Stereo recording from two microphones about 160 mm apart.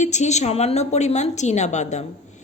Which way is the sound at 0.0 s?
45° left (ahead or behind).